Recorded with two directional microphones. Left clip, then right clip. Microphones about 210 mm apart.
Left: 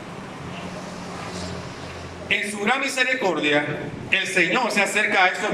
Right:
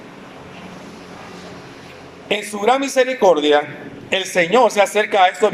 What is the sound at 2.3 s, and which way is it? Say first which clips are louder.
A man's voice: right 5 dB; 30° right (ahead or behind).